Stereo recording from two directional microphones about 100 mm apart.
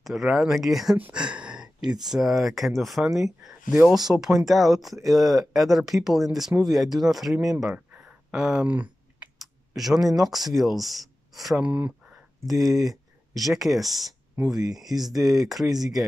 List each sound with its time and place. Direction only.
0.0 s speech: 5° right (ahead or behind)
0.9 s a sound: 15° right (ahead or behind)
2.0 s speech: 5° right (ahead or behind)
9.4 s clicking: centre (ahead or behind)
9.9 s speech: 35° right (ahead or behind)
10.2 s speech: centre (ahead or behind)
11.6 s speech: 15° right (ahead or behind)
12.4 s speech: centre (ahead or behind)